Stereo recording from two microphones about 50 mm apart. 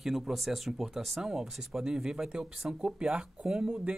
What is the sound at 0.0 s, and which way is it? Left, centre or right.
Speech, centre.